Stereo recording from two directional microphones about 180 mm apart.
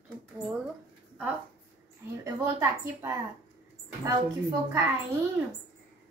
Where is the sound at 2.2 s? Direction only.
15° right (ahead or behind).